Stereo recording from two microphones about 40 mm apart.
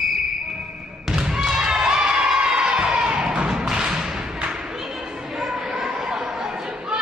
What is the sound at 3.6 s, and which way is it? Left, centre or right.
Whip, centre.